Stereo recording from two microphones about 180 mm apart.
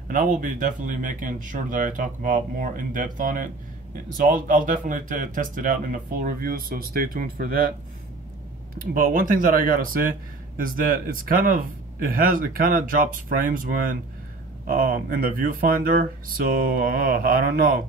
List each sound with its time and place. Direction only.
0.1 s speech: 50° right (ahead or behind)
8.7 s speech: 50° right (ahead or behind)